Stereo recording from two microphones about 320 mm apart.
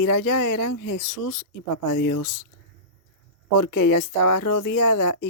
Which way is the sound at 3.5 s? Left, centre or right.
Left.